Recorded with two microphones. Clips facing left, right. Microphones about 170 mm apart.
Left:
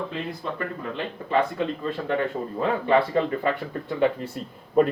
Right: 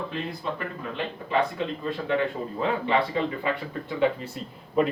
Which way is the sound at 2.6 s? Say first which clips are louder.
Left 3 dB; 45° left (ahead or behind).